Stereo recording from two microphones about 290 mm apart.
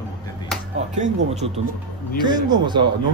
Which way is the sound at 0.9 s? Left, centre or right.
Right.